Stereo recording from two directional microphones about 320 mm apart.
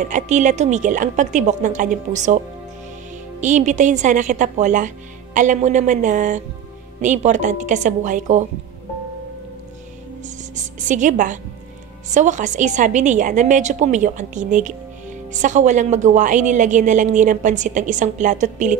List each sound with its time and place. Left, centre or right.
0.1 s a woman's voice: right
10.2 s a woman's voice: right